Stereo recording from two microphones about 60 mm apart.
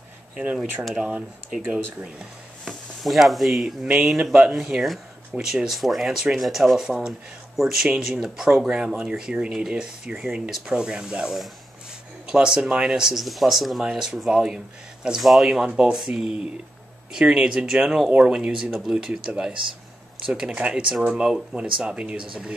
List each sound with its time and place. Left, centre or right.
0.9 s speech: centre
2.6 s speech: centre
3.8 s speech: centre
13.2 s speech: centre; by 20.8 s right
21.1 s speech: centre
21.5 s speech: centre